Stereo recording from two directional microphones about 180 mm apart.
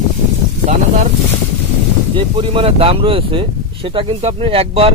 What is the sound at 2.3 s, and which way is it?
Speech, 30° right (ahead or behind).